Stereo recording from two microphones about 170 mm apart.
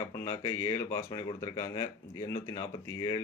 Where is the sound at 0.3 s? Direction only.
20° left (ahead or behind).